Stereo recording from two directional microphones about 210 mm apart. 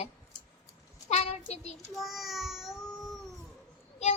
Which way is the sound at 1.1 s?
30° left (ahead or behind).